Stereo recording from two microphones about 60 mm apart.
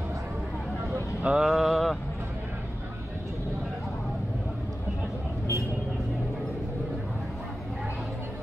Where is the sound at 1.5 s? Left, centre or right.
Centre.